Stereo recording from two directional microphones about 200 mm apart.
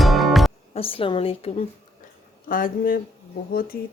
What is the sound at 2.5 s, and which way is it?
Speech, 45° left (ahead or behind).